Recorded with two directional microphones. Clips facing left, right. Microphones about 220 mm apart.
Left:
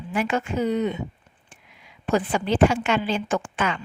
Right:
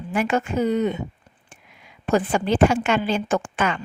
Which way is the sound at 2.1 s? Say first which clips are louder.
Right 2 dB; 45° right (ahead or behind).